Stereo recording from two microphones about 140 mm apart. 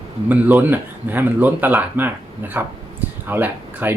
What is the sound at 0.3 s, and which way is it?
Speech, 10° right (ahead or behind).